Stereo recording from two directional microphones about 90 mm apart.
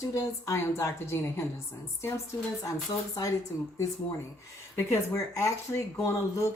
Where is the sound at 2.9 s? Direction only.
55° left (ahead or behind).